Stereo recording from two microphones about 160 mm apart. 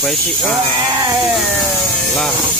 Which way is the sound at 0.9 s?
20° right (ahead or behind).